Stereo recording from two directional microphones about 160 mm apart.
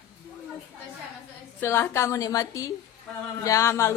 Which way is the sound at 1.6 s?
15° left (ahead or behind).